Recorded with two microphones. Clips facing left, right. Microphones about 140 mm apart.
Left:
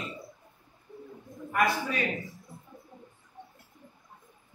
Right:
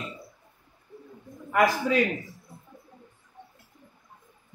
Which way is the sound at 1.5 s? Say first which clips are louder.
Right 5 dB; 90° right.